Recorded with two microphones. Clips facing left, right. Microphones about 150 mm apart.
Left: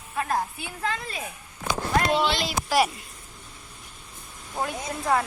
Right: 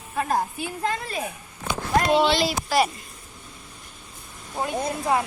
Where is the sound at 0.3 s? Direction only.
40° right (ahead or behind).